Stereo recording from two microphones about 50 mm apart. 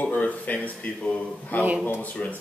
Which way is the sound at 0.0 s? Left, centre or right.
Left.